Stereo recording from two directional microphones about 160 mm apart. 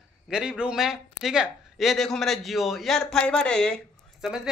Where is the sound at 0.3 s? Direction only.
5° right (ahead or behind).